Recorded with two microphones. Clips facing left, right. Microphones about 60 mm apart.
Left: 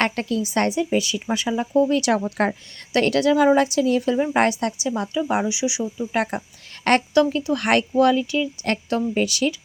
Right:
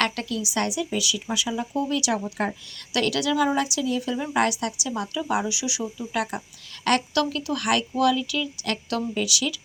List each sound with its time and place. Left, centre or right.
0.0 s a woman's voice: left
7.6 s a woman's voice: left